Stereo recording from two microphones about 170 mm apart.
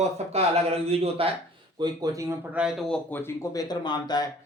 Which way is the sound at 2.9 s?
15° left (ahead or behind).